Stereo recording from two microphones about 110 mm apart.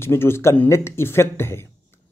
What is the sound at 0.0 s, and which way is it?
Speech, 20° left (ahead or behind).